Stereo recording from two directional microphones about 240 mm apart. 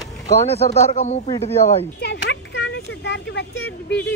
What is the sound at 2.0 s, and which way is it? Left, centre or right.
Speech, left.